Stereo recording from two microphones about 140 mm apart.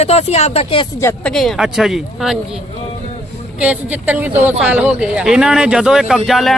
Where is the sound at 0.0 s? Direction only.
50° left (ahead or behind).